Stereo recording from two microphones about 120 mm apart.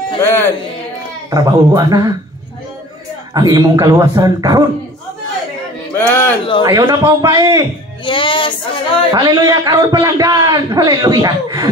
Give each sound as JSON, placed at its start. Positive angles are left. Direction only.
{"t": 0.2, "sound": "speech", "side_deg": 20}
{"t": 1.3, "sound": "a man's voice", "side_deg": -30}
{"t": 3.3, "sound": "a man's voice", "side_deg": -30}
{"t": 5.9, "sound": "a sound", "side_deg": 15}
{"t": 6.6, "sound": "a man's voice", "side_deg": -35}
{"t": 8.0, "sound": "speech", "side_deg": 45}
{"t": 9.1, "sound": "a man's voice", "side_deg": -35}